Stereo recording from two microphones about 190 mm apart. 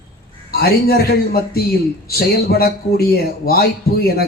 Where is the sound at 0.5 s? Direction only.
55° left (ahead or behind).